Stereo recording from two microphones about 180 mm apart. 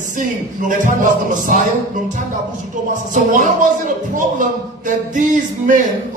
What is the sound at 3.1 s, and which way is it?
Speech, 45° right (ahead or behind).